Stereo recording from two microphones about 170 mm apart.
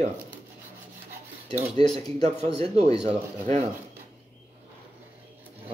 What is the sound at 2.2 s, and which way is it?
Speech, 35° right (ahead or behind).